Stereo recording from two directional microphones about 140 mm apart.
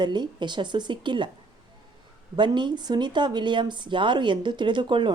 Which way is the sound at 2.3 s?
35° right (ahead or behind).